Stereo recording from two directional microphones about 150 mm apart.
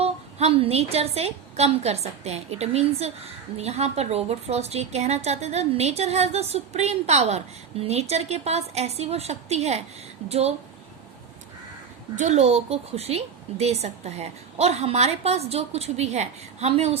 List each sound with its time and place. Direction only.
0.0 s a woman's voice: 45° right (ahead or behind)
12.1 s a woman's voice: 50° right (ahead or behind)